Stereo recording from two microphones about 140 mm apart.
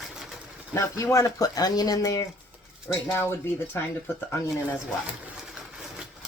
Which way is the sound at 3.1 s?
15° left (ahead or behind).